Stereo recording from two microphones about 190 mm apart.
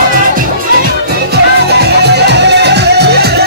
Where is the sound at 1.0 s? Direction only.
60° right (ahead or behind).